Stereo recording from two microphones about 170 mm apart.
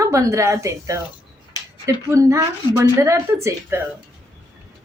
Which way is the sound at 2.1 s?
20° right (ahead or behind).